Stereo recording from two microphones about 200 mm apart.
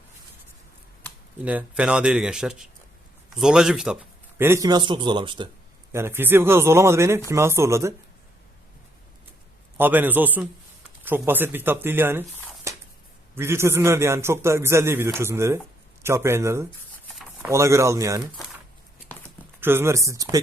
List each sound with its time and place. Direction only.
1.5 s speech: 5° right (ahead or behind); by 5.5 s 25° right (ahead or behind)
5.9 s a man's voice: 10° right (ahead or behind)
9.7 s a man's voice: 10° right (ahead or behind)
12.7 s a sound: 15° right (ahead or behind)
13.3 s a man's voice: 10° right (ahead or behind)
19.5 s a man's voice: 10° right (ahead or behind)